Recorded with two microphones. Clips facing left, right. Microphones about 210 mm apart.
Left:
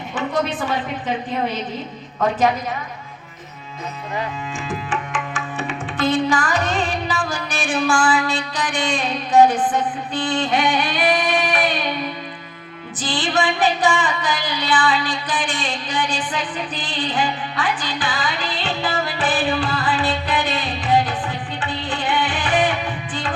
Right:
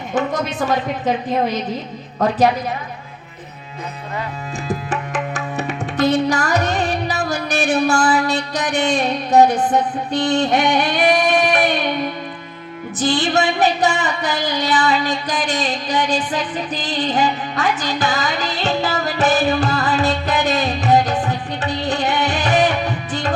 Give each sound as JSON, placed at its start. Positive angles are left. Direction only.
{"t": 0.1, "sound": "a woman's voice", "side_deg": -40}
{"t": 4.7, "sound": "music", "side_deg": -40}
{"t": 7.6, "sound": "a woman's voice", "side_deg": -40}
{"t": 10.2, "sound": "singing", "side_deg": -40}
{"t": 13.1, "sound": "a sound", "side_deg": -40}